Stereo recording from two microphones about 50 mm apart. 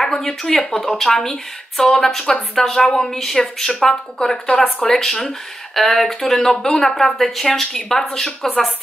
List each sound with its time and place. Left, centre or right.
0.0 s speech: centre